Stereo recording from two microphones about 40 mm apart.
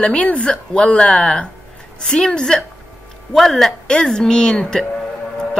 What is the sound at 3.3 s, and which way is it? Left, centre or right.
Speech, centre.